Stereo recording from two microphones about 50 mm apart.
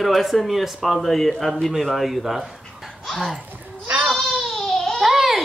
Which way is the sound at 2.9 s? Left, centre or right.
Centre.